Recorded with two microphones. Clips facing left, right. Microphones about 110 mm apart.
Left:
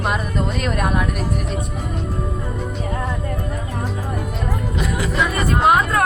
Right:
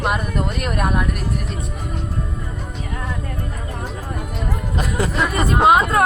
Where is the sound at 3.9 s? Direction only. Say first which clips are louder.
Left 3 dB; centre (ahead or behind).